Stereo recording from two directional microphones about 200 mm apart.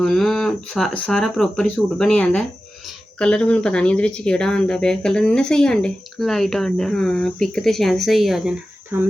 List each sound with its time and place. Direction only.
0.0 s speech: centre (ahead or behind)